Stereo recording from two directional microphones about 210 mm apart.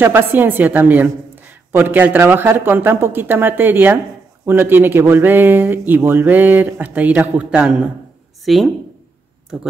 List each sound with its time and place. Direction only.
0.0 s a woman's voice: 10° right (ahead or behind)